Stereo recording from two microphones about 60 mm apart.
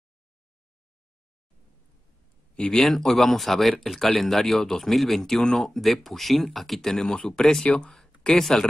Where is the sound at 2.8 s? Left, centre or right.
Centre.